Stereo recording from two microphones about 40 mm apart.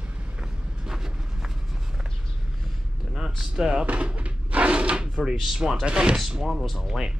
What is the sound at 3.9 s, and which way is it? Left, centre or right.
Drawer open or close, right.